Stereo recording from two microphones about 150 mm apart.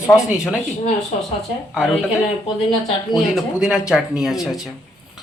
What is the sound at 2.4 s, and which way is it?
Speech, 35° left (ahead or behind).